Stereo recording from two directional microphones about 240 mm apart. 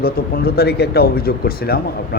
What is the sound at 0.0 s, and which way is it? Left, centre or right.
Speech, left.